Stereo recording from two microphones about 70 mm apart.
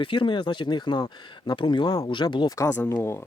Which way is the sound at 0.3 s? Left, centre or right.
Left.